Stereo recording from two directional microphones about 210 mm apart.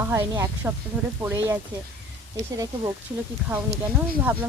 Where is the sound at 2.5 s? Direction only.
15° right (ahead or behind).